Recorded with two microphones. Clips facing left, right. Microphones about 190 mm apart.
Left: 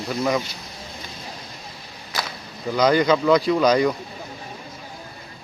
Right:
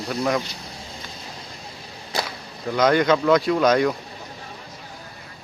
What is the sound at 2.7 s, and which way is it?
Speech, centre (ahead or behind).